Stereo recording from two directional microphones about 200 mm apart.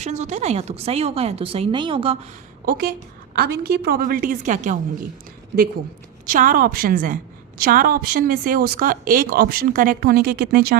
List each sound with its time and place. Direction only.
0.0 s a woman's voice: 35° right (ahead or behind)
2.6 s speech: 50° right (ahead or behind)
6.2 s speech: 45° right (ahead or behind)